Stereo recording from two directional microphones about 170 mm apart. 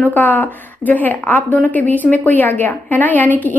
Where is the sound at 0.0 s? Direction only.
10° left (ahead or behind).